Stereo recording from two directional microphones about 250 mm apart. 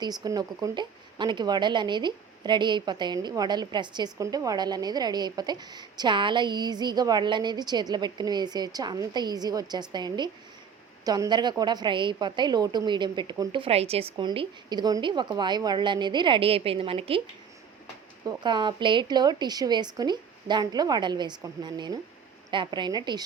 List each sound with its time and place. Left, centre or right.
0.0 s speech: centre
18.3 s speech: centre